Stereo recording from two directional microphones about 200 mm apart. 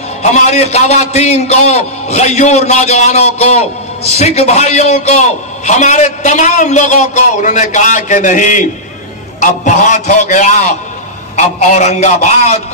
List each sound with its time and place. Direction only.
0.2 s a man's voice: 35° left (ahead or behind)